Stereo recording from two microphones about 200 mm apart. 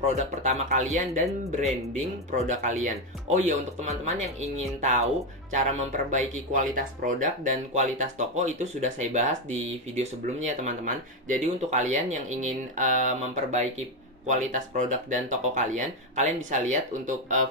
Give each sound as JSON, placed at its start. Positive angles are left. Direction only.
{"t": 0.0, "sound": "speech", "side_deg": -35}
{"t": 5.5, "sound": "speech", "side_deg": -35}